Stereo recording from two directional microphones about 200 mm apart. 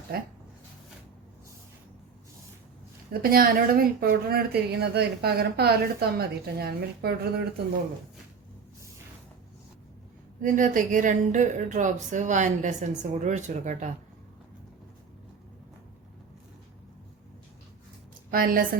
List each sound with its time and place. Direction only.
0.1 s a woman's voice: 50° right (ahead or behind)
3.1 s a woman's voice: 45° right (ahead or behind)
10.4 s a woman's voice: 40° right (ahead or behind)
18.3 s a woman's voice: 45° right (ahead or behind)